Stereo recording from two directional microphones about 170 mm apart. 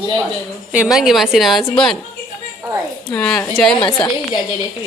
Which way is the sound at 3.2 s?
5° left (ahead or behind).